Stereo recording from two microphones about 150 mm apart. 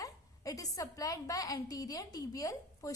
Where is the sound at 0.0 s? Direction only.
20° left (ahead or behind).